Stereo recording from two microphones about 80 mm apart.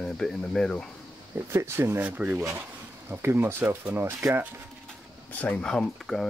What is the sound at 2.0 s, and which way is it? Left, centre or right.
Speech, right.